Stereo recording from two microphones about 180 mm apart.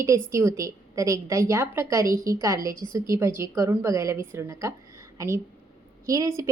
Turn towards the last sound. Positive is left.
turn(degrees=-15)  # may be behind; listen again after turning